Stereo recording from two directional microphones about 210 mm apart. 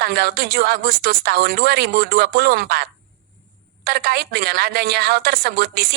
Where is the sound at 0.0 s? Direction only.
50° right (ahead or behind).